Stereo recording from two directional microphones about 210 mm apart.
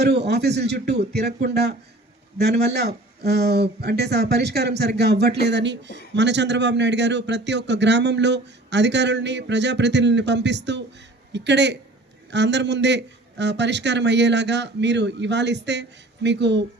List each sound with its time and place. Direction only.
0.0 s speech: 50° right (ahead or behind)